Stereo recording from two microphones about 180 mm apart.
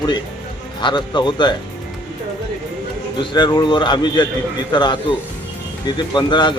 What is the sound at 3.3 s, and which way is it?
Speech, 25° left (ahead or behind).